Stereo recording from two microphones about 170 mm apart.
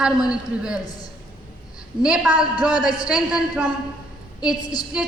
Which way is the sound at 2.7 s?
25° left (ahead or behind).